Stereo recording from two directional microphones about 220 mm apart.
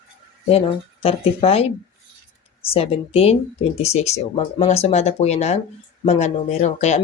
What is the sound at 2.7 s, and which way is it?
Speech, 25° left (ahead or behind).